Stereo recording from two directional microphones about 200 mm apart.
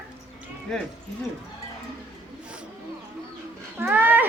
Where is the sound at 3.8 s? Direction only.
10° right (ahead or behind).